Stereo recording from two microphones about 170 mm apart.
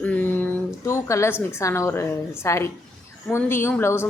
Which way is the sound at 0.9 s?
15° left (ahead or behind).